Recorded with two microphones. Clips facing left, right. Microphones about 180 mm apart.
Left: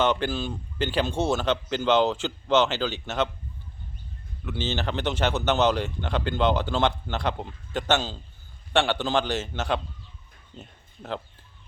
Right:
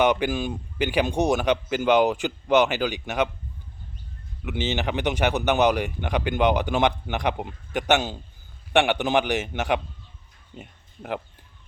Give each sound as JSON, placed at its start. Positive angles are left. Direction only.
{"t": 0.0, "sound": "speech", "side_deg": -15}
{"t": 4.4, "sound": "speech", "side_deg": -20}